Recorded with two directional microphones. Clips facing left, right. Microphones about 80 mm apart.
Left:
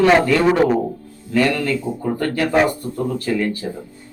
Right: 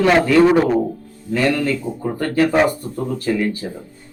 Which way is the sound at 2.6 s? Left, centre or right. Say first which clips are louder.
Right 1 dB; centre.